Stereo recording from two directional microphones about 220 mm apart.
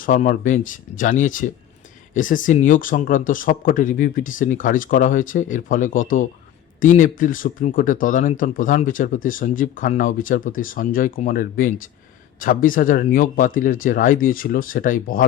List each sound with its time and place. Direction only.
0.0 s speech: 35° left (ahead or behind)